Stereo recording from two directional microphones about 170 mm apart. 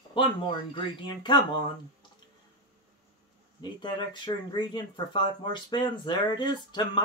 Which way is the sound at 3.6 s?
25° left (ahead or behind).